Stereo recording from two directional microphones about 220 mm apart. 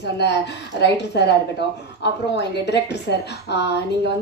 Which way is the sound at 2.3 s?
50° left (ahead or behind).